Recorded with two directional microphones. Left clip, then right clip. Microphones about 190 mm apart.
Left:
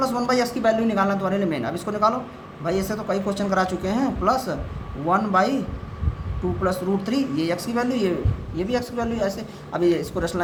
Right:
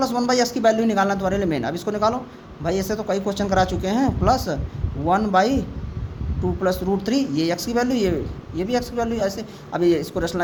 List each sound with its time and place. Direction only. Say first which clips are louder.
0.0 s speech: right 2 dB; 40° right (ahead or behind)
6.6 s speech: right 2 dB; 40° right (ahead or behind)